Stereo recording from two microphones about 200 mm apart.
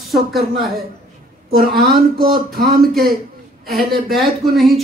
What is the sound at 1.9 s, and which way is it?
Speech, 45° right (ahead or behind).